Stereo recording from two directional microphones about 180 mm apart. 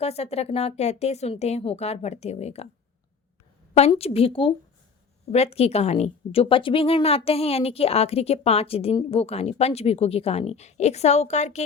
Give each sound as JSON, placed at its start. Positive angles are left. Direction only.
{"t": 0.0, "sound": "a woman's voice", "side_deg": 35}
{"t": 3.8, "sound": "a woman's voice", "side_deg": 35}